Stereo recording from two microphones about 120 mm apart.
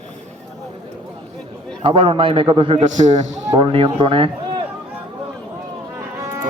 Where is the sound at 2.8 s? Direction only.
85° right.